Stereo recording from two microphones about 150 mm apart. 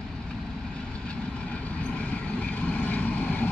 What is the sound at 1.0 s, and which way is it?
Vehicle, 10° left (ahead or behind).